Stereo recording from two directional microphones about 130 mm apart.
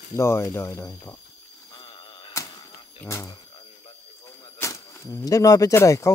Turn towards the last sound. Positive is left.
turn(degrees=25)  # may be behind; listen again after turning